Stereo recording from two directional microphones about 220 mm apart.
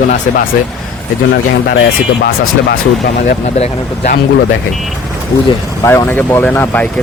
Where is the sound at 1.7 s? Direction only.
45° left (ahead or behind).